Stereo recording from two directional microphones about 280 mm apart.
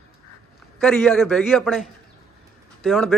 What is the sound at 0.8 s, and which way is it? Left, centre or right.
A man's voice, centre.